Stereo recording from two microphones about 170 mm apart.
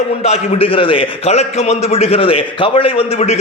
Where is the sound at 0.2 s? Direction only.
35° left (ahead or behind).